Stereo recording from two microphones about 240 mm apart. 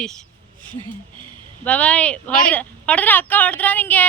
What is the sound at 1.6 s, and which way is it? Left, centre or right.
A woman's voice, centre.